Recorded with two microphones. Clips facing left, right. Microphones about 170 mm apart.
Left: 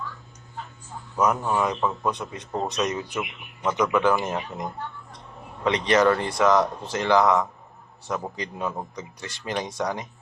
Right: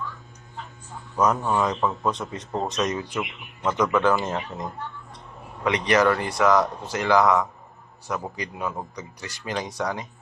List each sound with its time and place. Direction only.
1.2 s speech: 10° left (ahead or behind)